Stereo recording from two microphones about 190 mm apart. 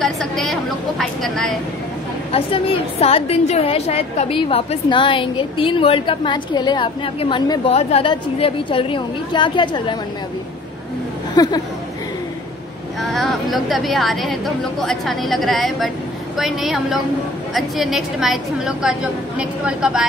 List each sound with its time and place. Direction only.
0.0 s a sound: centre (ahead or behind)
2.3 s a woman's voice: 30° left (ahead or behind)
11.3 s a woman's voice: 20° left (ahead or behind)
13.0 s a woman's voice: centre (ahead or behind)